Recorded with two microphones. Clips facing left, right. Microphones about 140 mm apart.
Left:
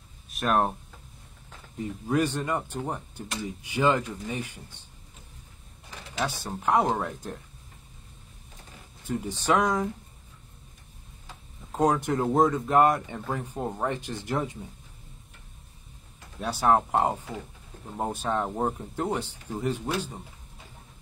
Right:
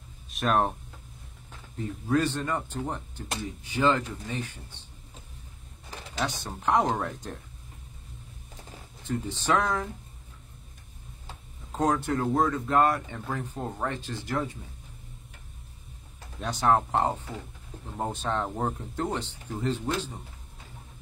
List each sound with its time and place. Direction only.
0.3 s speech: centre (ahead or behind)
1.8 s speech: 15° left (ahead or behind)
6.1 s speech: 10° left (ahead or behind)
9.0 s speech: 10° left (ahead or behind)
11.7 s speech: 10° left (ahead or behind)
16.3 s speech: 5° left (ahead or behind)